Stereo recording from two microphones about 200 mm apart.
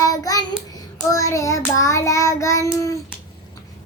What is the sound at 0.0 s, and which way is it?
Child singing, 15° left (ahead or behind).